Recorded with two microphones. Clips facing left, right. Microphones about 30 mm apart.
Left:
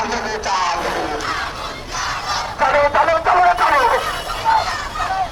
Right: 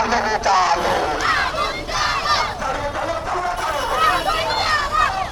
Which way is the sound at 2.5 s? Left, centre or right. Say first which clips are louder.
Left 9 dB; left.